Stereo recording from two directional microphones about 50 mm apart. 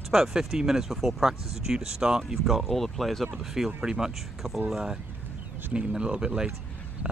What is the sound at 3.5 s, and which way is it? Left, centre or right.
Speech, centre.